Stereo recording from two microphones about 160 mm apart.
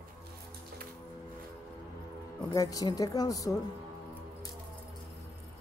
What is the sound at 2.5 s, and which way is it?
A woman's voice, 20° left (ahead or behind).